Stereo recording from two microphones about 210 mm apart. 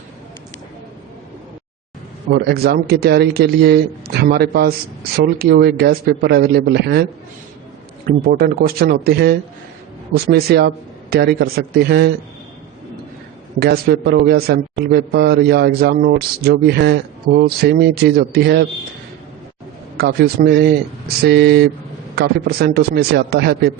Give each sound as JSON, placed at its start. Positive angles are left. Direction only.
{"t": 2.3, "sound": "a man's voice", "side_deg": -50}
{"t": 8.0, "sound": "a man's voice", "side_deg": -45}
{"t": 10.3, "sound": "a man's voice", "side_deg": -50}
{"t": 13.6, "sound": "a man's voice", "side_deg": -50}
{"t": 20.0, "sound": "a man's voice", "side_deg": -50}